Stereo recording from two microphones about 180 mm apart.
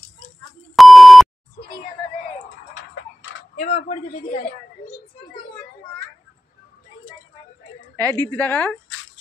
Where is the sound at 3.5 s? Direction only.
35° left (ahead or behind).